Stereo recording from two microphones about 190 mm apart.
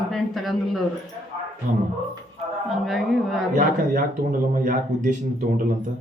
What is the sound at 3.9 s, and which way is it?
Speech, 45° right (ahead or behind).